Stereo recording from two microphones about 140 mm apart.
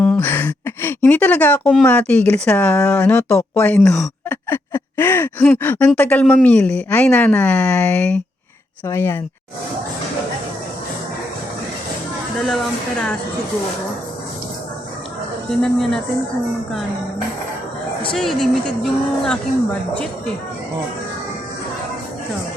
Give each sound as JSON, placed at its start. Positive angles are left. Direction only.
{"t": 0.0, "sound": "a sound", "side_deg": 10}
{"t": 1.8, "sound": "speech", "side_deg": 10}
{"t": 12.5, "sound": "speech", "side_deg": 5}
{"t": 15.6, "sound": "speech", "side_deg": 0}
{"t": 18.2, "sound": "speech", "side_deg": 0}